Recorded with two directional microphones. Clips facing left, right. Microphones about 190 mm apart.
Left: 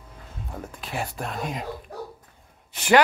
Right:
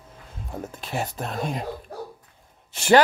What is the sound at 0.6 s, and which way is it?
Music, 25° right (ahead or behind).